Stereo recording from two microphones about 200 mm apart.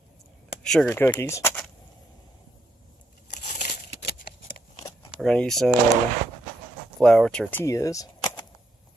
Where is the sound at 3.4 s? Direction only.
45° left (ahead or behind).